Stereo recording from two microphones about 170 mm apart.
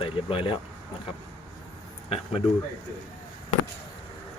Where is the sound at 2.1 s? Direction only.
35° left (ahead or behind).